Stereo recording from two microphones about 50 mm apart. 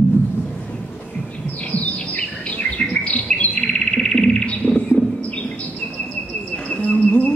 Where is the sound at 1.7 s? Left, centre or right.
Left.